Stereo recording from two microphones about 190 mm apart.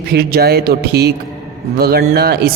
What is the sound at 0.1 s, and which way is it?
Speech, 55° right (ahead or behind).